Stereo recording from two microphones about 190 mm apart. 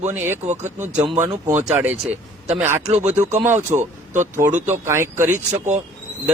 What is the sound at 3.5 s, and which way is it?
Speech, 40° right (ahead or behind).